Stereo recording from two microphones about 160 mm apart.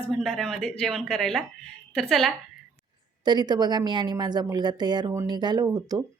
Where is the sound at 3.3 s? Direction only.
25° right (ahead or behind).